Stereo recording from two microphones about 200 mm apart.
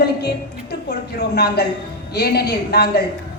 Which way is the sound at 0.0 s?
55° left (ahead or behind).